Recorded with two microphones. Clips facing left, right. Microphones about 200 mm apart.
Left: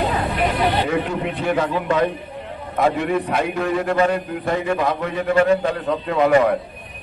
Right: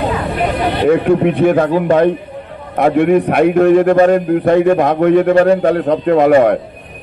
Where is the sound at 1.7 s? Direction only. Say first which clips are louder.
Right 8 dB; 40° right (ahead or behind).